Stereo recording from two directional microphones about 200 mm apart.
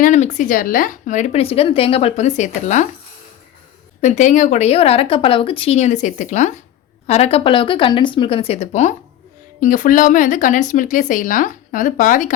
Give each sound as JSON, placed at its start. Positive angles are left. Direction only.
{"t": 0.0, "sound": "a woman's voice", "side_deg": 35}
{"t": 4.0, "sound": "a woman's voice", "side_deg": 35}